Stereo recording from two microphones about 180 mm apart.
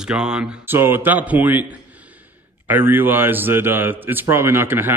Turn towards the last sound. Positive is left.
turn(degrees=-10)  # may be behind; listen again after turning